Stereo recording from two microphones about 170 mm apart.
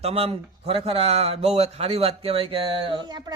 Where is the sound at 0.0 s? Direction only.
35° right (ahead or behind).